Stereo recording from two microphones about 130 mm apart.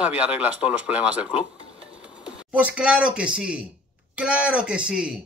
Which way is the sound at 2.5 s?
10° right (ahead or behind).